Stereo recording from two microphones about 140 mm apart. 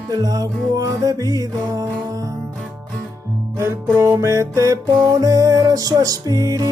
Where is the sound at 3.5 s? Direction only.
20° right (ahead or behind).